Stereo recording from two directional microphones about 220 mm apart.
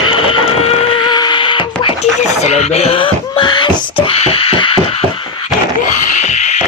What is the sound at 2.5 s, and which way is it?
Wail, 30° left (ahead or behind).